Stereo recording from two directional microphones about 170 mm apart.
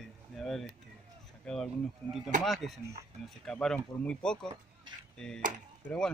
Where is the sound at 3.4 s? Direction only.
5° left (ahead or behind).